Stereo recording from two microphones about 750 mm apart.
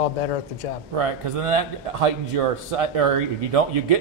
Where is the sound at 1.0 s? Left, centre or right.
Right.